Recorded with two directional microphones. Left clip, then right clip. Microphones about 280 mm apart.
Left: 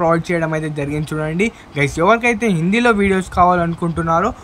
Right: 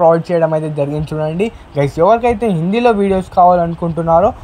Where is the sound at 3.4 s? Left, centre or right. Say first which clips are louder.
Right 5 dB; left.